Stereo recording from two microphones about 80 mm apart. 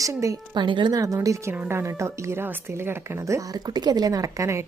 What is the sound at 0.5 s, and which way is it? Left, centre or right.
Speech, right.